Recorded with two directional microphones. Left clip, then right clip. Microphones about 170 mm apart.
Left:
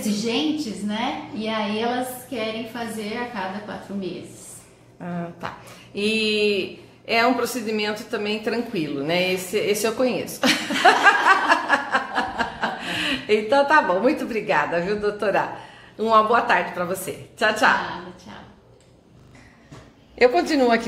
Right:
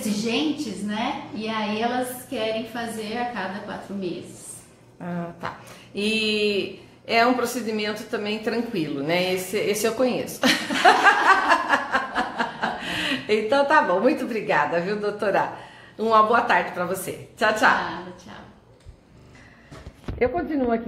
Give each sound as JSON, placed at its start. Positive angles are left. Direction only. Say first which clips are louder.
{"t": 0.0, "sound": "a woman's voice", "louder": "left 1 dB", "side_deg": 0}
{"t": 20.2, "sound": "a woman's voice", "louder": "left 6 dB", "side_deg": 30}